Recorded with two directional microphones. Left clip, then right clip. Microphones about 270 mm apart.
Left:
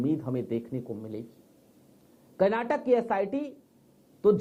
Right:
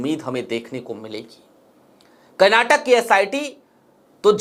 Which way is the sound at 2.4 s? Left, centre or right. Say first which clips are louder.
Right 12 dB; centre.